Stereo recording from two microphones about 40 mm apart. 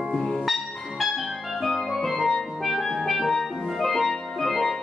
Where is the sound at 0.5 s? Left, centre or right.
Centre.